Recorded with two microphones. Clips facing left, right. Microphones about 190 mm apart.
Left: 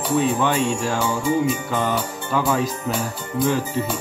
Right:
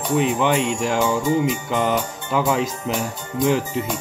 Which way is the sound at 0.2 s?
15° right (ahead or behind).